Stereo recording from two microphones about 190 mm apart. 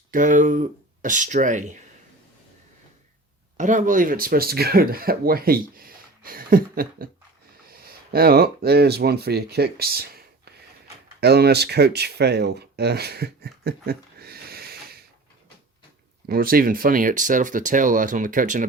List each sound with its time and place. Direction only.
0.1 s speech: 45° right (ahead or behind)
3.6 s speech: 40° right (ahead or behind)
16.2 s speech: 50° right (ahead or behind)